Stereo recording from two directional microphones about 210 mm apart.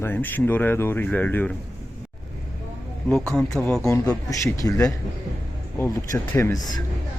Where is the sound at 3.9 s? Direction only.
15° left (ahead or behind).